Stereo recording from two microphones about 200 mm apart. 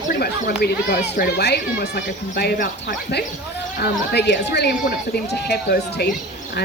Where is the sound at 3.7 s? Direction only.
55° left (ahead or behind).